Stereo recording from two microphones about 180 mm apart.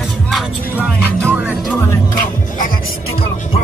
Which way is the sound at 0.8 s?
10° right (ahead or behind).